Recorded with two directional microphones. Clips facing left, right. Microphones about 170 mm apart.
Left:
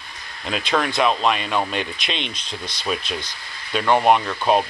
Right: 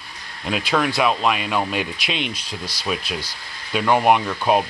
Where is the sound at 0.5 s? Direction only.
5° right (ahead or behind).